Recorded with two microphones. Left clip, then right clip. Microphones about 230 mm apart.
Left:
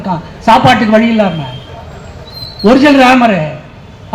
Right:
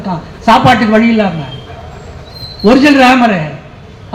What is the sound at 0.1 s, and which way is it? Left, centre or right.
A man's voice, left.